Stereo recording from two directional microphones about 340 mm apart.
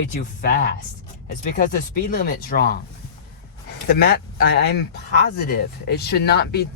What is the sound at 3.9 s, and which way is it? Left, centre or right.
Speech, left.